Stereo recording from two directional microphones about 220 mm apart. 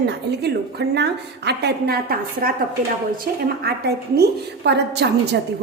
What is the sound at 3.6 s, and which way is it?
A woman's voice, 45° right (ahead or behind).